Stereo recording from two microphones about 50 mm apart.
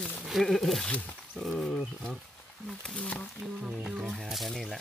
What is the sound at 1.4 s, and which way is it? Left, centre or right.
Wild animals, centre.